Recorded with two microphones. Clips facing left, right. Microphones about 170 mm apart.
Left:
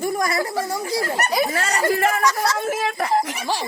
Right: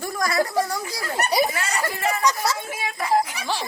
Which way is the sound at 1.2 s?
15° right (ahead or behind).